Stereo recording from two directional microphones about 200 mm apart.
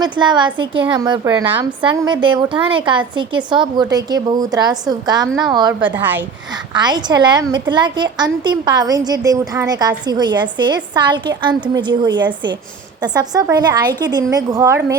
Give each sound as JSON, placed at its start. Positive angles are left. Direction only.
{"t": 0.0, "sound": "a woman's voice", "side_deg": -20}
{"t": 5.8, "sound": "a woman's voice", "side_deg": -10}
{"t": 6.7, "sound": "a woman's voice", "side_deg": -20}